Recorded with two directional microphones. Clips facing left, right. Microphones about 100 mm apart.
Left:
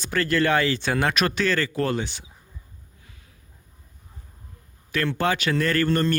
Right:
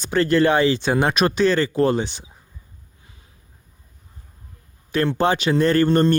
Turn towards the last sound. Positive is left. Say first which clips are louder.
# right 6 dB
turn(degrees=-25)  # may be behind; listen again after turning